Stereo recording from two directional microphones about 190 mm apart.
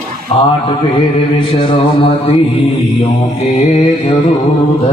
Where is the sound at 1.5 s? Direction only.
30° left (ahead or behind).